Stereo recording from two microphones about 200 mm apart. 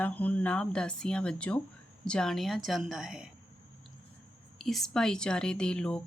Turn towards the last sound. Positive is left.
turn(degrees=5)  # may be behind; listen again after turning